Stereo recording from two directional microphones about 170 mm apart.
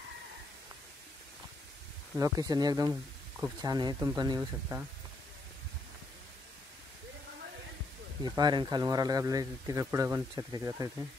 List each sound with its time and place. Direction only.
2.1 s a man's voice: 20° right (ahead or behind)
2.9 s a sound: 5° right (ahead or behind)
3.6 s a man's voice: 25° right (ahead or behind)
8.2 s a man's voice: 25° right (ahead or behind)